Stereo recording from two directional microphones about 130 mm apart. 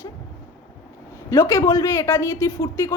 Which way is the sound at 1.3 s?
25° left (ahead or behind).